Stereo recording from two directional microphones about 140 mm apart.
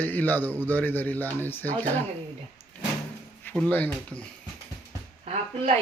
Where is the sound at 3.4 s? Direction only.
15° left (ahead or behind).